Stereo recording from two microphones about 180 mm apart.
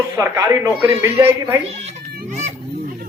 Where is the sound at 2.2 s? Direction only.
40° right (ahead or behind).